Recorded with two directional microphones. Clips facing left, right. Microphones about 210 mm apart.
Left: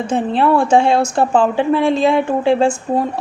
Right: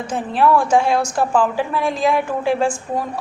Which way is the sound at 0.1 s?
25° left (ahead or behind).